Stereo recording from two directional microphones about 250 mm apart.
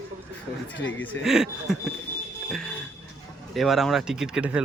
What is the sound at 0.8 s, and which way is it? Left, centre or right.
Speech, left.